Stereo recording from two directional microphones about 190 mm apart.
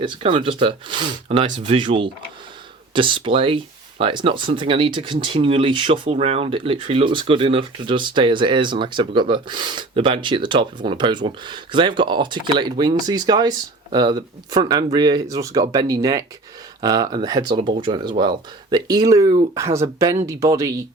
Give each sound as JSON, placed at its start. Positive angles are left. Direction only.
{"t": 0.0, "sound": "speech", "side_deg": -25}